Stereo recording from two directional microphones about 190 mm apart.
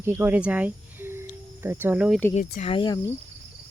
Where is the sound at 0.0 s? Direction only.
10° right (ahead or behind).